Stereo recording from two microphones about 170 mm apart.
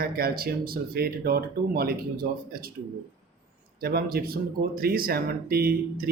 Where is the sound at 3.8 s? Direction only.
65° right (ahead or behind).